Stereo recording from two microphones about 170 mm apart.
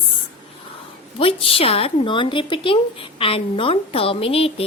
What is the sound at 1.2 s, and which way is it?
Speech, 35° left (ahead or behind).